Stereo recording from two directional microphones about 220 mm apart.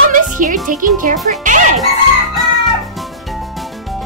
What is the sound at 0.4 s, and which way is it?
Speech, 35° right (ahead or behind).